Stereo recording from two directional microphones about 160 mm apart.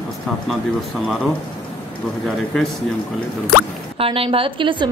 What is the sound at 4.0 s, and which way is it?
Speech, 35° right (ahead or behind).